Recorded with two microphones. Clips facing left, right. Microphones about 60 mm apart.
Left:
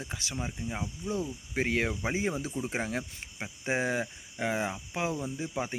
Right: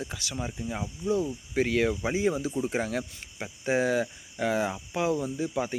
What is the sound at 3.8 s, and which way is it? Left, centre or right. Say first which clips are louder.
Speech: right 6 dB; left.